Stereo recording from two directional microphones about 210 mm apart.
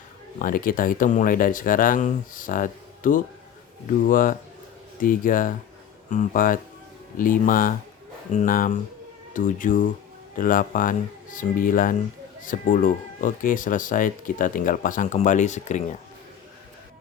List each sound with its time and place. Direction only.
0.3 s speech: 40° left (ahead or behind)